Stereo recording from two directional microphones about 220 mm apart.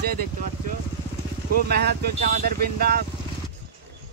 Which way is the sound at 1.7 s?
45° right (ahead or behind).